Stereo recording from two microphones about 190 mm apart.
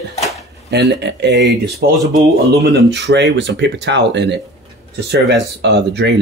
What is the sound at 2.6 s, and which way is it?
Speech, 65° right (ahead or behind).